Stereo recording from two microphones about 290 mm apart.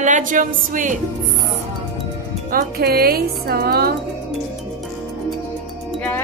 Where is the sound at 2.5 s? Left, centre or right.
Right.